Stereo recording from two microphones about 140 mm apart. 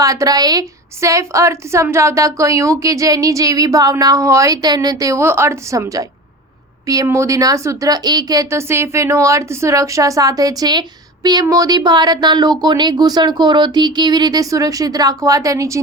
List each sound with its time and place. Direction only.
0.0 s a woman's voice: 25° right (ahead or behind)